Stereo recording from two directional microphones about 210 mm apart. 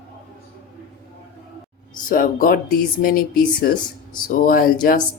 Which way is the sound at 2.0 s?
40° left (ahead or behind).